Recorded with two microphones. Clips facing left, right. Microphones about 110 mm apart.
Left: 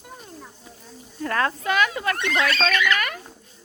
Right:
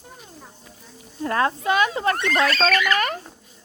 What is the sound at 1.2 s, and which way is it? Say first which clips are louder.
Speech: right 2 dB; 25° right (ahead or behind).